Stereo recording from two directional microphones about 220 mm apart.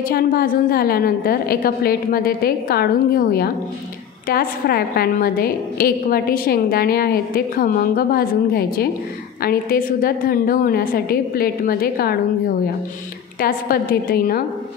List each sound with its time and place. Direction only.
0.1 s a woman's voice: 40° left (ahead or behind)
13.4 s a woman's voice: 40° left (ahead or behind)